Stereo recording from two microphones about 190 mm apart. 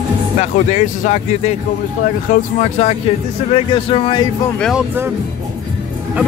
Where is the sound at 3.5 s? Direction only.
30° left (ahead or behind).